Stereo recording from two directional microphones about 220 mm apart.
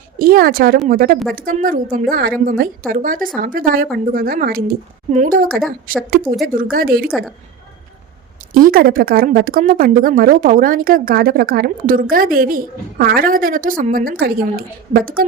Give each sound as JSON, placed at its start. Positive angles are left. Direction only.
{"t": 0.2, "sound": "speech", "side_deg": -40}
{"t": 8.5, "sound": "speech", "side_deg": -40}